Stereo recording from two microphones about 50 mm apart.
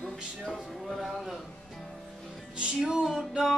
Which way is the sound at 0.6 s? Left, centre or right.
Centre.